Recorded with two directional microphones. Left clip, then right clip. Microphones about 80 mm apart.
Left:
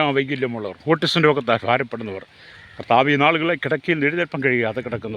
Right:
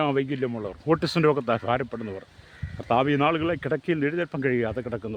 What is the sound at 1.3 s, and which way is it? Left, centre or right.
Speech, left.